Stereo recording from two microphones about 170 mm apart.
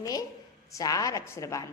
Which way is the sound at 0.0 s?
20° left (ahead or behind).